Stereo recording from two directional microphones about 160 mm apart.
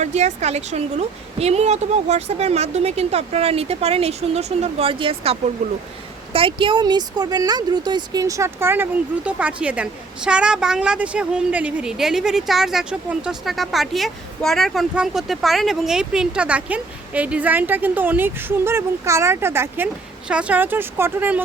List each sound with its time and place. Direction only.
0.0 s a woman's voice: 45° right (ahead or behind); by 21.4 s 10° right (ahead or behind)